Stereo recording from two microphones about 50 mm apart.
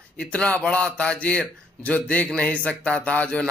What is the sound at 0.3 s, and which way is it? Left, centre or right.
A man's voice, left.